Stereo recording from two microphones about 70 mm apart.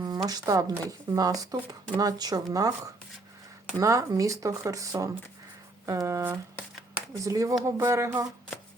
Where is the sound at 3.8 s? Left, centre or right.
Right.